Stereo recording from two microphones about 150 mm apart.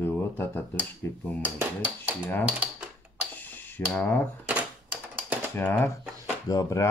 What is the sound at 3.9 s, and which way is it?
Speech, 5° left (ahead or behind).